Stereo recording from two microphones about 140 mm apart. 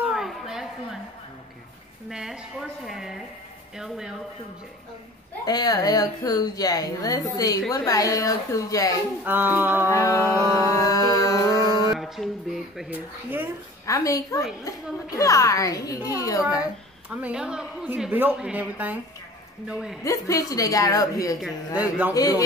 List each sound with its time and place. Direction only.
0.0 s a sound: centre (ahead or behind)
2.0 s a woman's voice: 5° right (ahead or behind)
5.4 s a woman's voice: 30° left (ahead or behind)
9.2 s a woman's voice: 15° right (ahead or behind)
9.8 s a woman's voice: 20° left (ahead or behind)
10.6 s a sound: 25° left (ahead or behind)
12.2 s a woman's voice: centre (ahead or behind)
12.9 s a woman's voice: 15° right (ahead or behind)
13.8 s a woman's voice: 25° left (ahead or behind)
17.1 s a woman's voice: 5° right (ahead or behind)
20.0 s a woman's voice: 25° left (ahead or behind)
21.7 s a woman's voice: 10° right (ahead or behind)
22.1 s a woman's voice: 25° left (ahead or behind)